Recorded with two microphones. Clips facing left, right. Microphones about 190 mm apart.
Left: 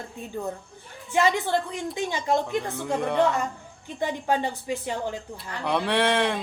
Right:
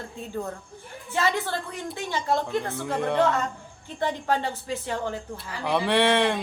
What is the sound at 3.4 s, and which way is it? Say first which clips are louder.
Speech: even; 15° left (ahead or behind).